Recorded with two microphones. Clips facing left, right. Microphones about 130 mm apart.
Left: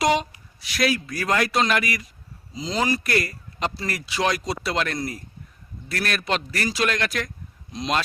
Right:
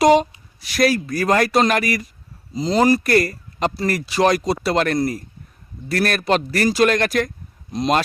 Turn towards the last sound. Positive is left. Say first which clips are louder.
# right 6 dB
turn(degrees=-45)  # may be behind; listen again after turning